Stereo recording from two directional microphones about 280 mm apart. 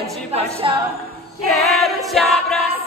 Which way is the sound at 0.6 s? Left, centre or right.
Centre.